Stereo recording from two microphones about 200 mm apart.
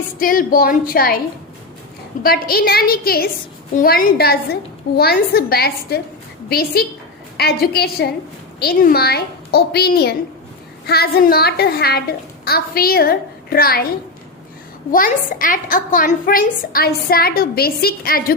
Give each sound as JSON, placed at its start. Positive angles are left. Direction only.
{"t": 0.2, "sound": "a woman's voice", "side_deg": 45}
{"t": 2.2, "sound": "a woman's voice", "side_deg": 50}
{"t": 14.9, "sound": "a woman's voice", "side_deg": 45}